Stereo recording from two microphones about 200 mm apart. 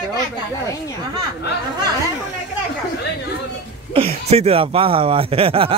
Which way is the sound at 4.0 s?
30° right (ahead or behind).